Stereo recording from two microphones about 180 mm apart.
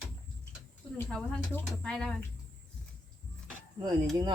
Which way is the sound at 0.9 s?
5° left (ahead or behind).